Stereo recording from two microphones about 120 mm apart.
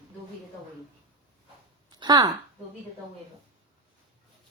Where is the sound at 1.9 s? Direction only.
35° right (ahead or behind).